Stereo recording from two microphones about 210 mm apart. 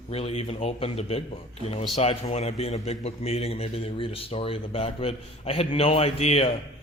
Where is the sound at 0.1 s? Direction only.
30° left (ahead or behind).